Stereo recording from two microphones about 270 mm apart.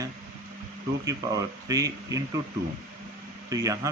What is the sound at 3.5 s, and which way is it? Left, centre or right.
Speech, centre.